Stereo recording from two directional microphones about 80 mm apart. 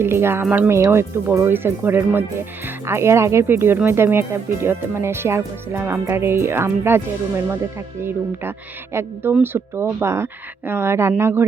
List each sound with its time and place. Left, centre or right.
0.0 s speech: right
8.0 s speech: right